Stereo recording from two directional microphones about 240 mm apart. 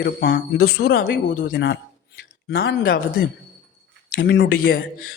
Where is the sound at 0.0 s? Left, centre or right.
Left.